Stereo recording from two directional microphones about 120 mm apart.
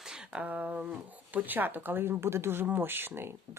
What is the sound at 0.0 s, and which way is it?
Speech, 5° right (ahead or behind).